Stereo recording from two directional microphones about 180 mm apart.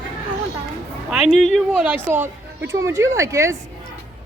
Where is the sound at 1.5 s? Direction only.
5° right (ahead or behind).